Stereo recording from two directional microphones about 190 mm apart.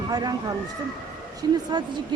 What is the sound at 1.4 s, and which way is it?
Speech, 20° right (ahead or behind).